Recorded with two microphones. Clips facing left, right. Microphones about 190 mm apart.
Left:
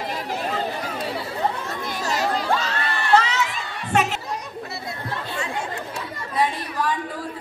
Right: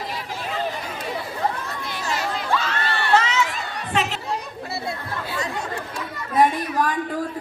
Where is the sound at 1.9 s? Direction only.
40° left (ahead or behind).